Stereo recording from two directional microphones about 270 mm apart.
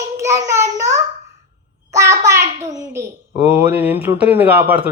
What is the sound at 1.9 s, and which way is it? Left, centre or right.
A child's voice, centre.